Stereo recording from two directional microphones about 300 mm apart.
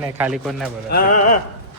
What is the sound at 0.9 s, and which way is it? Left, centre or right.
Speech, left.